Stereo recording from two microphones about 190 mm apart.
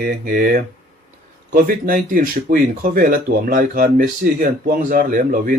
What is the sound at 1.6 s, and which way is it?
Speech, 45° right (ahead or behind).